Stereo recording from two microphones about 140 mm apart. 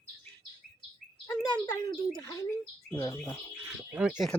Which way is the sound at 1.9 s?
30° left (ahead or behind).